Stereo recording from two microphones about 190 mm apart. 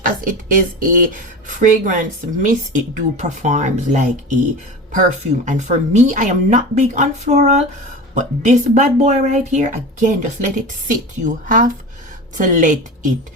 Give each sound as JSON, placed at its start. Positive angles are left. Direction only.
{"t": 0.0, "sound": "speech", "side_deg": -45}
{"t": 5.5, "sound": "speech", "side_deg": -40}